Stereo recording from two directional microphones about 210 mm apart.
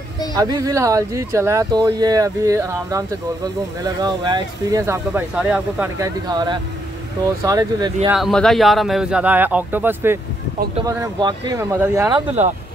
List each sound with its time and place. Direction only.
0.3 s speech: 20° right (ahead or behind)
8.1 s speech: centre (ahead or behind)